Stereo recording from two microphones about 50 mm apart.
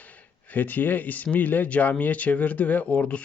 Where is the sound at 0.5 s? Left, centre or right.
Left.